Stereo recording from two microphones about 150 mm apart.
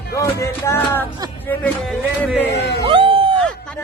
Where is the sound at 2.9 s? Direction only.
35° right (ahead or behind).